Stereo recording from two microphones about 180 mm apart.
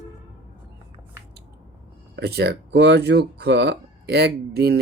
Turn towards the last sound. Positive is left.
turn(degrees=-65)  # may be behind; listen again after turning